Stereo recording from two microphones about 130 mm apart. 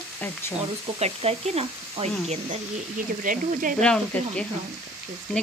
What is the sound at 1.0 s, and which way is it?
Speech, 55° right (ahead or behind).